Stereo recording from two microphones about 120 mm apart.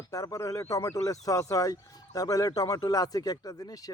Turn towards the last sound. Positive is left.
turn(degrees=30)  # may be behind; listen again after turning